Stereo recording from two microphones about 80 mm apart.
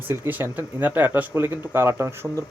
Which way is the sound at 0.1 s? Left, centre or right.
Right.